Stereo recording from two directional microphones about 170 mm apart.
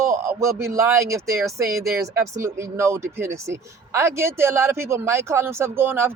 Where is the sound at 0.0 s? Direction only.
15° right (ahead or behind).